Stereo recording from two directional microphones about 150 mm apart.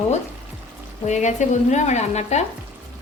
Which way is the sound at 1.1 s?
50° left (ahead or behind).